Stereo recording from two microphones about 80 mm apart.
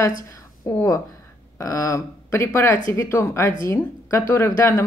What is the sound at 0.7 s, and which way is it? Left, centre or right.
Speech, left.